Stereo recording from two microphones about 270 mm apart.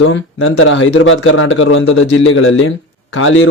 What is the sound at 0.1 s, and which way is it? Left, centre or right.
Speech, left.